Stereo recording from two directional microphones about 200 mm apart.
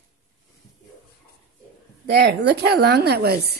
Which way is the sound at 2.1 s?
55° right (ahead or behind).